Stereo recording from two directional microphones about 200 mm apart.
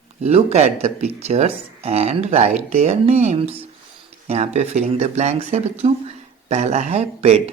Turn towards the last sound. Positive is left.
turn(degrees=-30)  # may be behind; listen again after turning